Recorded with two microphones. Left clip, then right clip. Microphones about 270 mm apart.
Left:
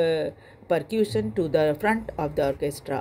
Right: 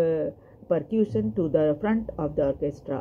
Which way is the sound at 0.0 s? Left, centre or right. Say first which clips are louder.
Left 1 dB; left.